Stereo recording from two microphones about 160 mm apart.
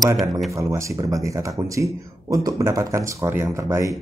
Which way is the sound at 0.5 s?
20° right (ahead or behind).